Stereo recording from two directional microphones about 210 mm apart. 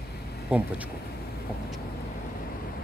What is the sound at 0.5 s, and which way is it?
Speech, 5° right (ahead or behind).